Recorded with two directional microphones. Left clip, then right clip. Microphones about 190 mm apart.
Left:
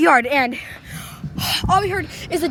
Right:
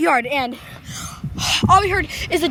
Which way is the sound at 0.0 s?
20° left (ahead or behind).